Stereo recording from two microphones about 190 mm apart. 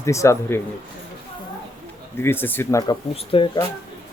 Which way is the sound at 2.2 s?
10° left (ahead or behind).